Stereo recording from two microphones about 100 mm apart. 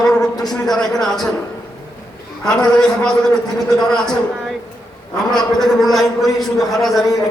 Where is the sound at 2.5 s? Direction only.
5° left (ahead or behind).